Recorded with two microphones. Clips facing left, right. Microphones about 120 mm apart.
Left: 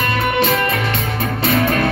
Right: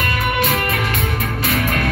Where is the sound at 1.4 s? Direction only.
30° left (ahead or behind).